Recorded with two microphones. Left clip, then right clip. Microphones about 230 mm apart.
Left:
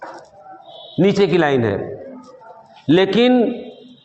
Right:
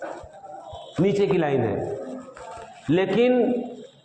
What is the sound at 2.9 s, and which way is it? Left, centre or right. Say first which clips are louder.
Speech: left 6 dB; left.